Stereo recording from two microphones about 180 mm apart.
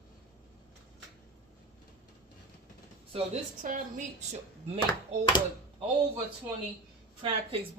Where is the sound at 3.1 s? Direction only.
40° right (ahead or behind).